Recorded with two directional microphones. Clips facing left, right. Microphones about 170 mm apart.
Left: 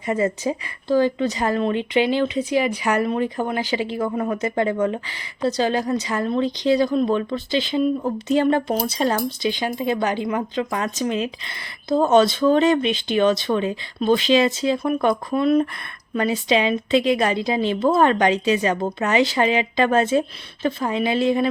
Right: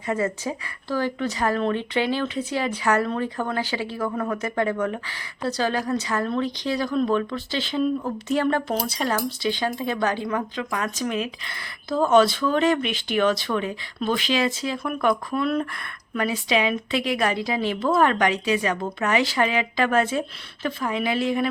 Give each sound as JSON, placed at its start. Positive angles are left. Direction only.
{"t": 0.0, "sound": "speech", "side_deg": 20}